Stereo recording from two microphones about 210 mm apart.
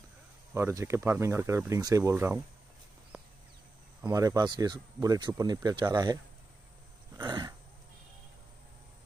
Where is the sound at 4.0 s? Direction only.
15° right (ahead or behind).